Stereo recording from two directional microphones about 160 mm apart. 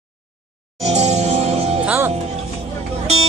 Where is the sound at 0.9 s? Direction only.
40° right (ahead or behind).